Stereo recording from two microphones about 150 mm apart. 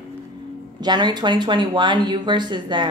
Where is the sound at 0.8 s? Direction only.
30° right (ahead or behind).